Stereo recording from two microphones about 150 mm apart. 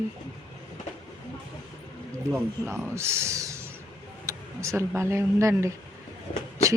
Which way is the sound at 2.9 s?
15° right (ahead or behind).